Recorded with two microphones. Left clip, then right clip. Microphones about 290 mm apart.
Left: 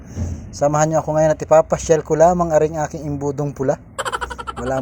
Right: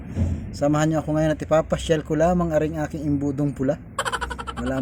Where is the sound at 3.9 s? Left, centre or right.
Centre.